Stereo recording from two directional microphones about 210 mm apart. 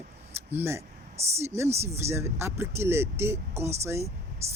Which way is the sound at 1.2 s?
30° right (ahead or behind).